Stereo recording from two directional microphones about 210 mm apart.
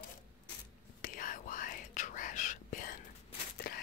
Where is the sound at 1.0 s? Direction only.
40° left (ahead or behind).